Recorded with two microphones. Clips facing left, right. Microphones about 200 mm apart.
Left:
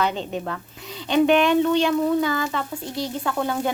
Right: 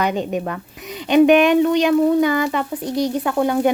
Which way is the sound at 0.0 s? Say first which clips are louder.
Right 4 dB; 10° right (ahead or behind).